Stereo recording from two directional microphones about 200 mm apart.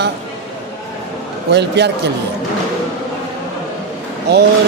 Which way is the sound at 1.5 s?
55° right (ahead or behind).